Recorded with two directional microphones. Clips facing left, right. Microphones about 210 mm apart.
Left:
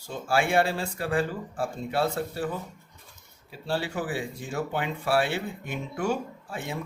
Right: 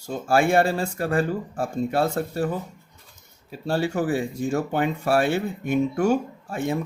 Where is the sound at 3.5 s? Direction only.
45° right (ahead or behind).